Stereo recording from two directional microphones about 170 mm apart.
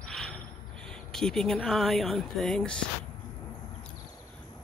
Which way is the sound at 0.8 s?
5° left (ahead or behind).